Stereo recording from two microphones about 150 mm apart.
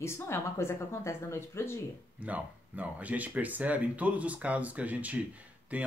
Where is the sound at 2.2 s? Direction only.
10° right (ahead or behind).